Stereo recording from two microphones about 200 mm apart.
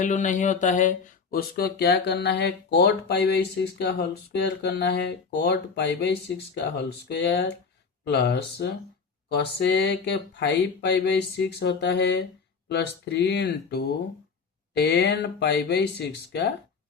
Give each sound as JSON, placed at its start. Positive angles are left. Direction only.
{"t": 0.0, "sound": "speech", "side_deg": 40}